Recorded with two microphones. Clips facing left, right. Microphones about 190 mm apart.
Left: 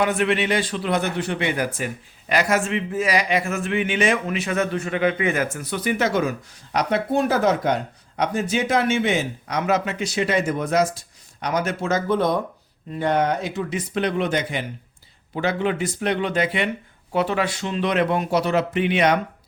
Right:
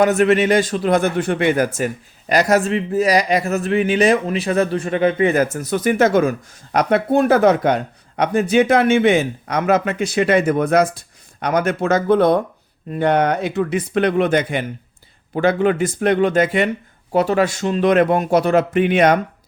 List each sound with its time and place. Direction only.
0.0 s speech: 45° right (ahead or behind)